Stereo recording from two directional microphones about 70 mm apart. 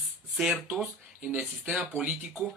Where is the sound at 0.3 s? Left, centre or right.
Centre.